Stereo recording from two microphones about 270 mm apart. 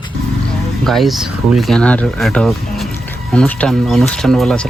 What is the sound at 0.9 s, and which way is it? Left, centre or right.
Speech, centre.